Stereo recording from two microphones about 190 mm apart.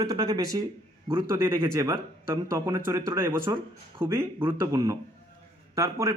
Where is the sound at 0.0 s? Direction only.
20° right (ahead or behind).